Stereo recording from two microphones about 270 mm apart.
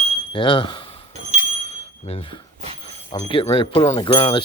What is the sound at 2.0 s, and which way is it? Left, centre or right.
Speech, centre.